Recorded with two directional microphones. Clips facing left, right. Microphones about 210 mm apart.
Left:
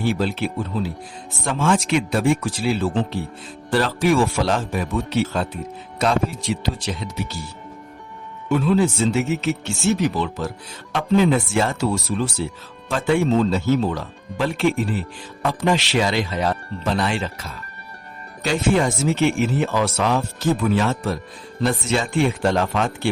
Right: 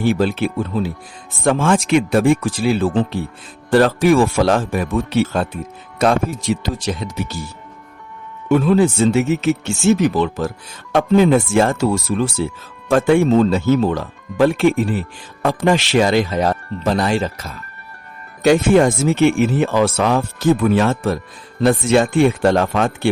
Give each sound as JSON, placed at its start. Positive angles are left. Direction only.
{"t": 0.0, "sound": "speech", "side_deg": -50}
{"t": 8.4, "sound": "speech", "side_deg": -50}
{"t": 18.4, "sound": "speech", "side_deg": -55}